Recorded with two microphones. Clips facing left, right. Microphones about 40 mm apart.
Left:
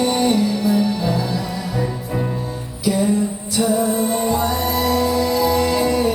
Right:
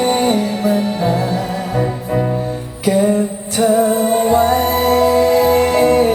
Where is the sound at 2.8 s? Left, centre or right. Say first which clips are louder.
Right 4 dB; right.